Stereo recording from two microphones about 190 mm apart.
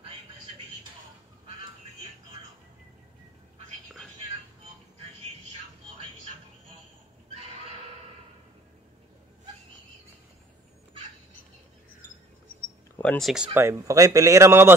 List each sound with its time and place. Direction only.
13.0 s speech: 5° left (ahead or behind)
13.6 s a man's voice: 15° right (ahead or behind)